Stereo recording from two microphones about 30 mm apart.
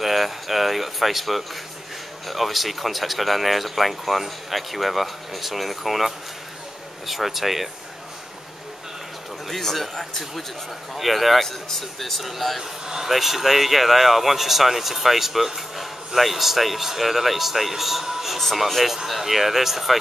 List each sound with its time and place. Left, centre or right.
0.0 s speech: centre
9.6 s speech: centre
11.0 s speech: centre
12.8 s a man's voice: centre
13.1 s speech: centre
18.4 s speech: centre